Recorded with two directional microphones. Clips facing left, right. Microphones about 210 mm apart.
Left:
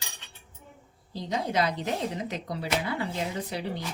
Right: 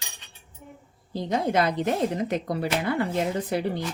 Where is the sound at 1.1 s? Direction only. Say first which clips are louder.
Right 5 dB; 55° right (ahead or behind).